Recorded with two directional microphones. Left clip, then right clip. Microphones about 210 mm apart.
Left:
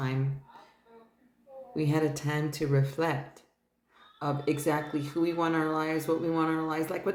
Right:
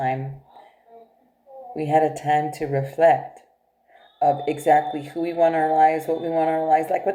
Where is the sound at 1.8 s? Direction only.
20° left (ahead or behind).